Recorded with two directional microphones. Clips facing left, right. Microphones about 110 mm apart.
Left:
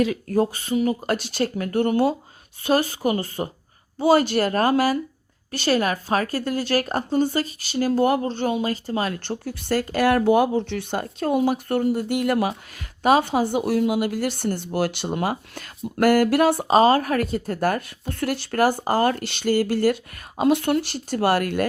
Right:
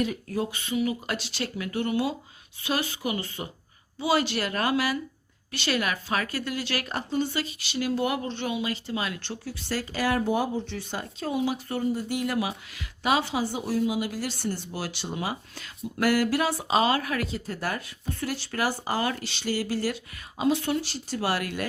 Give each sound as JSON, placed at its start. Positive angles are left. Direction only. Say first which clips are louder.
{"t": 0.3, "sound": "a woman's voice", "louder": "left 8 dB", "side_deg": 40}